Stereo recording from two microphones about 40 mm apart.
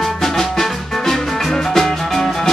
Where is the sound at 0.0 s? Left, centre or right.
Centre.